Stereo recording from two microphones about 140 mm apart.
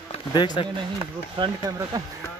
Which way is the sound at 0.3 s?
35° left (ahead or behind).